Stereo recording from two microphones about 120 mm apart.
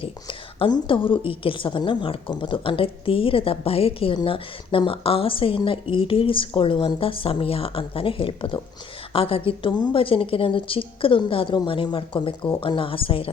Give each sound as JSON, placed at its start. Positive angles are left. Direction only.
{"t": 0.0, "sound": "a sound", "side_deg": 50}
{"t": 0.9, "sound": "a woman's voice", "side_deg": 45}
{"t": 4.1, "sound": "a woman's voice", "side_deg": 45}